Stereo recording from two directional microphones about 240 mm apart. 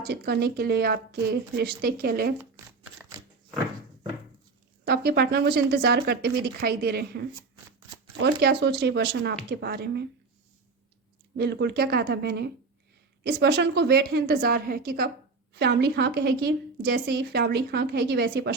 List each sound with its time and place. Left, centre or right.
0.0 s speech: right
3.0 s biting: centre
4.9 s a woman's voice: right
11.3 s a woman's voice: right